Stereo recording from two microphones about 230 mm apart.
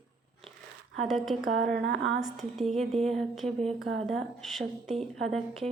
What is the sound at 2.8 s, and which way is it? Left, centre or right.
Speech, right.